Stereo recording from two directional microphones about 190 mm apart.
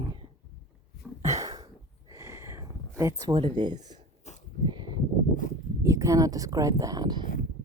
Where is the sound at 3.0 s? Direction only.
15° right (ahead or behind).